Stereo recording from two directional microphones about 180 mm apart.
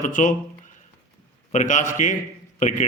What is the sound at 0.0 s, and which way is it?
Speech, 45° left (ahead or behind).